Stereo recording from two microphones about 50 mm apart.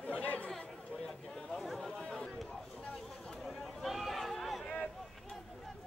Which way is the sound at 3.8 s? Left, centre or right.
Centre.